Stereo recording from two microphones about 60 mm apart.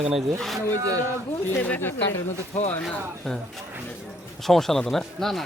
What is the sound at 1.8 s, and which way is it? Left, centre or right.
Speech, left.